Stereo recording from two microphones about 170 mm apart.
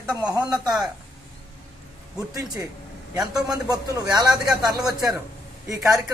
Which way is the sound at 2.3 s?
20° right (ahead or behind).